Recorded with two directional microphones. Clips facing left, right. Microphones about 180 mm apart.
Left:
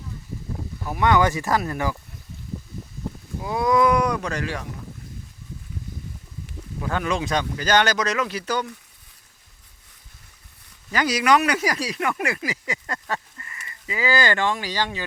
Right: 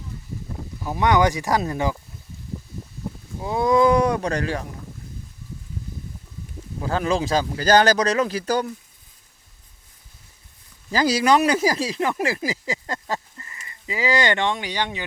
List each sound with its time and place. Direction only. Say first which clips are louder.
0.9 s speech: right 1 dB; 15° right (ahead or behind)
3.4 s speech: right 2 dB; 30° right (ahead or behind)
6.8 s speech: right 3 dB; 30° right (ahead or behind)
10.9 s speech: right 2 dB; 30° right (ahead or behind)